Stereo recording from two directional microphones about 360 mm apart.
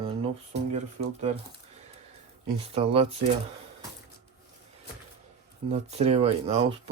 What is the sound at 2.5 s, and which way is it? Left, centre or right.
Speech, centre.